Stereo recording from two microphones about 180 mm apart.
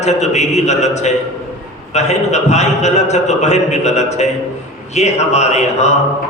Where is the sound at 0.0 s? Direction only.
40° left (ahead or behind).